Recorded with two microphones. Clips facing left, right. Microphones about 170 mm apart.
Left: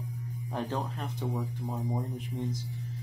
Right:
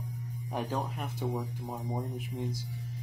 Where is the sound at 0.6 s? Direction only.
5° right (ahead or behind).